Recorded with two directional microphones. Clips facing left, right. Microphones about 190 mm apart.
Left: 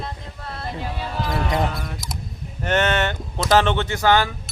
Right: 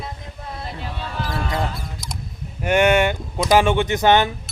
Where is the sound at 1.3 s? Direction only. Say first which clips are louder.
Left 3 dB; 20° left (ahead or behind).